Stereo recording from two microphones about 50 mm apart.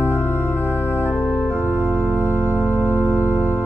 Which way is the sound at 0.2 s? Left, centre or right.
Left.